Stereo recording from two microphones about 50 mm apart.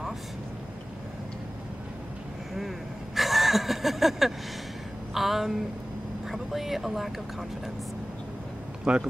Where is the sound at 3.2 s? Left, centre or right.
Centre.